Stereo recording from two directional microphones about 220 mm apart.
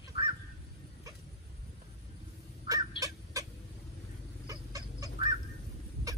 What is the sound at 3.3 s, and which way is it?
Vehicle, 15° right (ahead or behind).